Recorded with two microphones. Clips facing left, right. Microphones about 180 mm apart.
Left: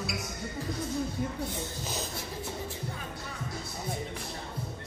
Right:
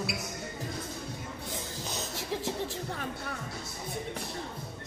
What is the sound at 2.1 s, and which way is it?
Music, 90° right.